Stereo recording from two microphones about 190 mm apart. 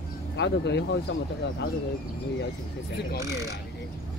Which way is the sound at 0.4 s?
65° left (ahead or behind).